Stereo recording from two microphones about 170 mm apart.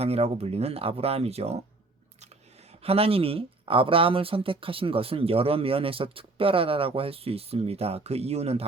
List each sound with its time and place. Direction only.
0.0 s speech: 35° right (ahead or behind)
2.8 s speech: 35° right (ahead or behind)